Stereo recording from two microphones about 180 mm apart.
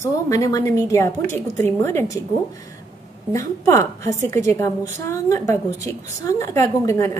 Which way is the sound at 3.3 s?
15° left (ahead or behind).